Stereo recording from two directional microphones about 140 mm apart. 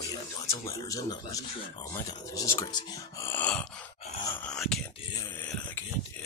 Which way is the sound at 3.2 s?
15° left (ahead or behind).